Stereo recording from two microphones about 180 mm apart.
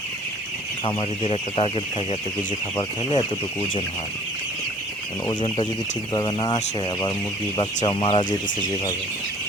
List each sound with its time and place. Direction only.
0.9 s speech: 30° left (ahead or behind)
5.3 s speech: 25° left (ahead or behind)
7.9 s speech: 30° left (ahead or behind)